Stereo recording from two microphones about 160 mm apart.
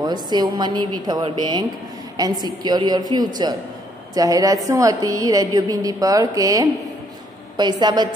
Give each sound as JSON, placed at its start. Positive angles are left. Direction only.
{"t": 0.0, "sound": "a woman's voice", "side_deg": -25}